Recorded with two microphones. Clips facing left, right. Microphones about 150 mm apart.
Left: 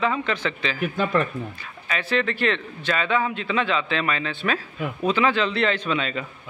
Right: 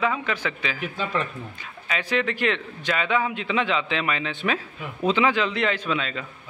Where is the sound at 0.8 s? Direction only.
55° left (ahead or behind).